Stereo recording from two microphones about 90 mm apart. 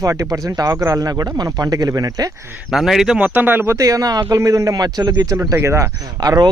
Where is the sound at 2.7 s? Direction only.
5° right (ahead or behind); by 5.4 s 45° right (ahead or behind).